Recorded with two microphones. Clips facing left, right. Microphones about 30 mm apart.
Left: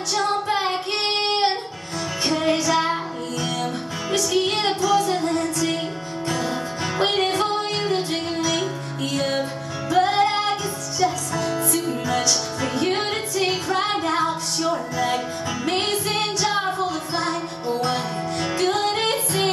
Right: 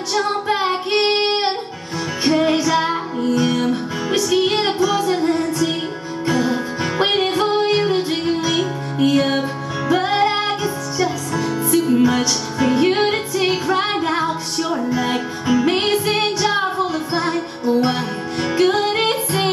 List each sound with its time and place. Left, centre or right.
0.1 s female singing: centre
2.2 s music: centre